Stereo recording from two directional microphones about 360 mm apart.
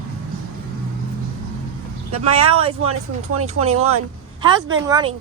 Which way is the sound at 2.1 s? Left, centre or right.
Centre.